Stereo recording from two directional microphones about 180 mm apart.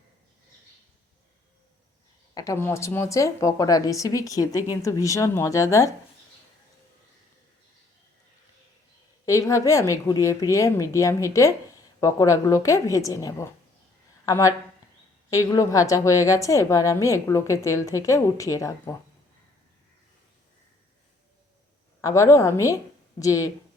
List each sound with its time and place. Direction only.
2.3 s a woman's voice: 20° left (ahead or behind)
9.2 s a woman's voice: 15° left (ahead or behind)
22.0 s a woman's voice: 15° left (ahead or behind)